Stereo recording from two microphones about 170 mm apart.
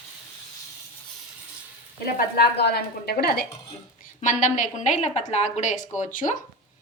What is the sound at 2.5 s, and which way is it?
Speech, 70° left (ahead or behind).